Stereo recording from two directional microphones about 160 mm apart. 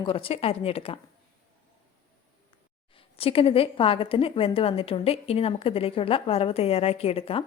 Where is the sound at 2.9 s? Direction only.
35° left (ahead or behind).